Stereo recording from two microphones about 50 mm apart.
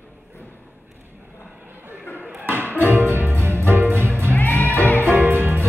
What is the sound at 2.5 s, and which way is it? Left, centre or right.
Music, right.